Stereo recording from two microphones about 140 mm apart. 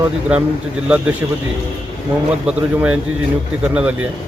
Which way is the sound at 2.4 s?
5° right (ahead or behind).